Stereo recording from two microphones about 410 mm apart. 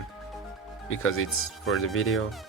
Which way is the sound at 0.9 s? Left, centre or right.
Left.